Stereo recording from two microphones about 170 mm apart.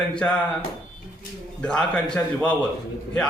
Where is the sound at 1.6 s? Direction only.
5° left (ahead or behind).